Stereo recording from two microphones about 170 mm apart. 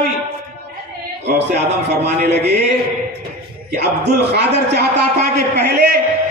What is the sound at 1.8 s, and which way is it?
Speech, 75° right (ahead or behind).